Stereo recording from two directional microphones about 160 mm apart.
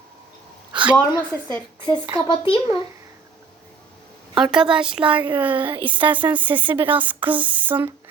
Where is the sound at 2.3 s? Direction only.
30° left (ahead or behind).